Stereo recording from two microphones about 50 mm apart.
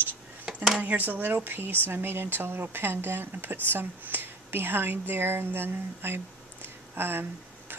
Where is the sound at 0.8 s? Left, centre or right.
Right.